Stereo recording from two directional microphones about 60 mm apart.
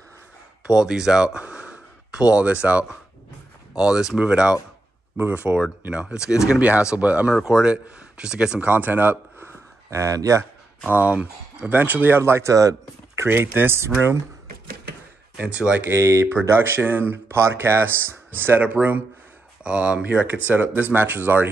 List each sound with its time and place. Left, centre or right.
0.7 s speech: centre
5.1 s speech: right; by 8.5 s centre
8.5 s speech: right
9.8 s speech: right
10.9 s speech: right
12.5 s speech: right
13.3 s speech: right
15.3 s speech: right
15.9 s speech: right
18.6 s speech: right